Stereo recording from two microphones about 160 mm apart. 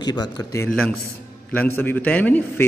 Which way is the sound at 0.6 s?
5° left (ahead or behind).